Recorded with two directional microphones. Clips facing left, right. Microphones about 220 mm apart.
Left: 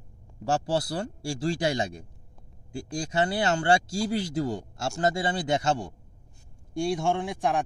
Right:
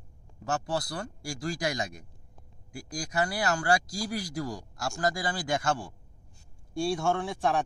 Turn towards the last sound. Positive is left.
turn(degrees=15)  # may be behind; listen again after turning